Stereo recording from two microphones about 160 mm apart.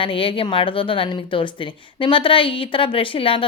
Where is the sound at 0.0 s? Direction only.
35° left (ahead or behind).